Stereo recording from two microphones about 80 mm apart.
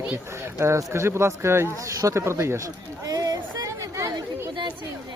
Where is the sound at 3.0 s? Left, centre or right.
Right.